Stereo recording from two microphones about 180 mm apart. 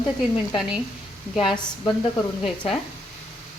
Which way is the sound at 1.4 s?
25° left (ahead or behind).